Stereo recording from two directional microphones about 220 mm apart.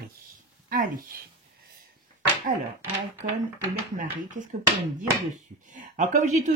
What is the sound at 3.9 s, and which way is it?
Speech, 35° right (ahead or behind).